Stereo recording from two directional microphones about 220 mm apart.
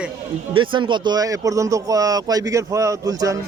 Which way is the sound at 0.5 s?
20° right (ahead or behind).